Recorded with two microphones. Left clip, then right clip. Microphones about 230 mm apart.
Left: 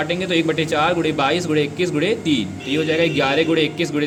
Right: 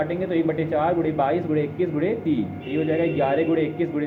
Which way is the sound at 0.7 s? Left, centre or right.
Left.